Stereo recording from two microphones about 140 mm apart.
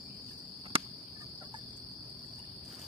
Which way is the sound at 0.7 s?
40° right (ahead or behind).